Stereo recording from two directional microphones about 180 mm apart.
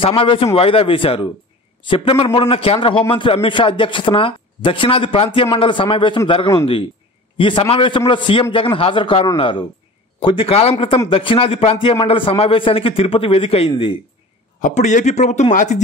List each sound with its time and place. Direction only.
0.0 s a man's voice: 30° left (ahead or behind)
14.6 s a man's voice: 40° left (ahead or behind)